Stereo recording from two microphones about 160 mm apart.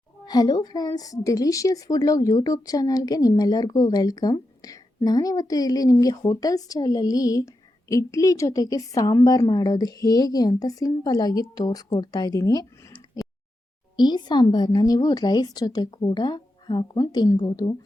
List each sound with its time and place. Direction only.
0.3 s a woman's voice: 25° left (ahead or behind)